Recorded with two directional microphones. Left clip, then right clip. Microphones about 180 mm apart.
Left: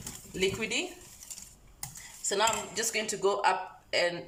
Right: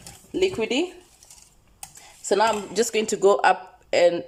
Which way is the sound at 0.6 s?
90° right.